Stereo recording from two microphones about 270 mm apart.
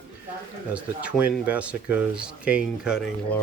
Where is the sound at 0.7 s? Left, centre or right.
Centre.